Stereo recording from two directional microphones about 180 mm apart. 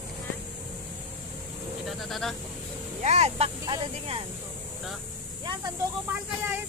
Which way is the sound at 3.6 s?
20° right (ahead or behind).